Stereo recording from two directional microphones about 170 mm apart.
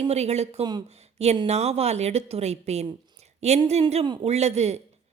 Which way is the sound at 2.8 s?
40° right (ahead or behind).